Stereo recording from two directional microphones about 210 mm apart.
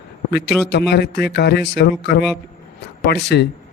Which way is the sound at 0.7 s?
50° left (ahead or behind).